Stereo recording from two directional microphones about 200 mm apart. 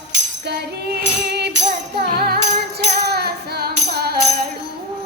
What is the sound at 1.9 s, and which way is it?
Music, 50° right (ahead or behind).